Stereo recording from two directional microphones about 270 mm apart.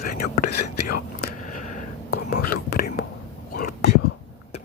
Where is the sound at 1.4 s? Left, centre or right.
Left.